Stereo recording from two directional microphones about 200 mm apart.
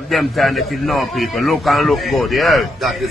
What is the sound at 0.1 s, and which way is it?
Speech, centre (ahead or behind).